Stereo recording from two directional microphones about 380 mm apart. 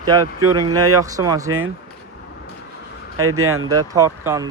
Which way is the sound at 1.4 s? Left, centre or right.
Right.